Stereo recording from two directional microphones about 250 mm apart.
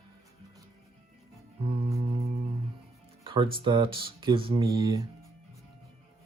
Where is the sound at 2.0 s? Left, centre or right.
Right.